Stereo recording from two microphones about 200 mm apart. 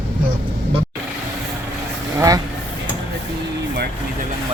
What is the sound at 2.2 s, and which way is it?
Vehicle, 15° right (ahead or behind).